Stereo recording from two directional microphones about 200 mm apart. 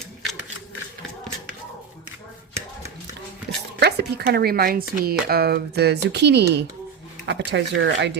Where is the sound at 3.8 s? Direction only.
55° right (ahead or behind).